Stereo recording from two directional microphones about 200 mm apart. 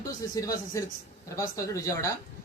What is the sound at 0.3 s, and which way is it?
A man's voice, 15° left (ahead or behind).